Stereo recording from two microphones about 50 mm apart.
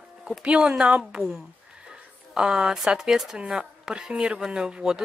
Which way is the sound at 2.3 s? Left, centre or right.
Centre.